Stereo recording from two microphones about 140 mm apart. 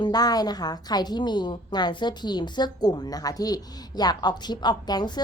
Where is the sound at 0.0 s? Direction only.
30° left (ahead or behind).